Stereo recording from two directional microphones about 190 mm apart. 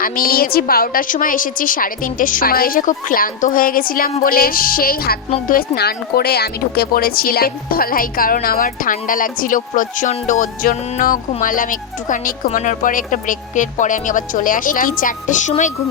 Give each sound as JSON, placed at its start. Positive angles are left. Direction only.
{"t": 0.0, "sound": "speech", "side_deg": 50}